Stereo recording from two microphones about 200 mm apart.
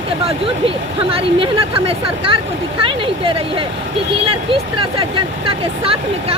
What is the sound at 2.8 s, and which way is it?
Speech, 25° right (ahead or behind).